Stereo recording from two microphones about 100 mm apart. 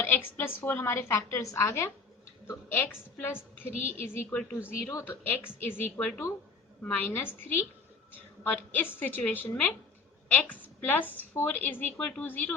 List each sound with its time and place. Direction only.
0.0 s a woman's voice: 20° left (ahead or behind)